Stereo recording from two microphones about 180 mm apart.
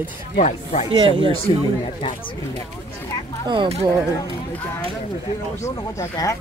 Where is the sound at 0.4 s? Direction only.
40° left (ahead or behind).